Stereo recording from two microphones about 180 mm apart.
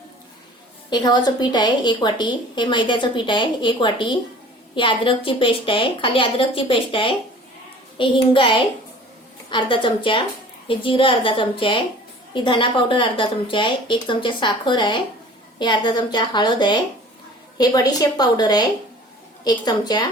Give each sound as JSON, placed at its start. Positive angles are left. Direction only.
{"t": 0.9, "sound": "a woman's voice", "side_deg": 25}